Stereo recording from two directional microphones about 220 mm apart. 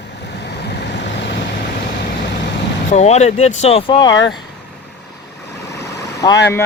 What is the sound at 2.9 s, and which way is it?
Speech, 30° left (ahead or behind).